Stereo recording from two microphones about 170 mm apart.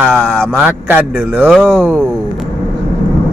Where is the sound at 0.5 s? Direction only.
10° right (ahead or behind).